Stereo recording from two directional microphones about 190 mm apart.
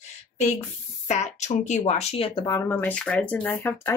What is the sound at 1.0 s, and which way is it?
Speech, 40° left (ahead or behind).